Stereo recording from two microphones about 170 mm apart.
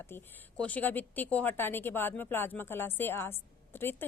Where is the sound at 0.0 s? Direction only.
15° left (ahead or behind).